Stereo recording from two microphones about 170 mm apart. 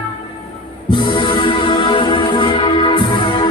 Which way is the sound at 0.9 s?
25° left (ahead or behind).